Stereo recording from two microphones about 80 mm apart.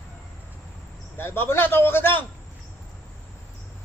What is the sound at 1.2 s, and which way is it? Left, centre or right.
A man's voice, left.